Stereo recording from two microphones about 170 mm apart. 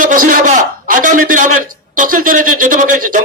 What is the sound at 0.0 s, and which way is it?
A man's voice, 50° right (ahead or behind).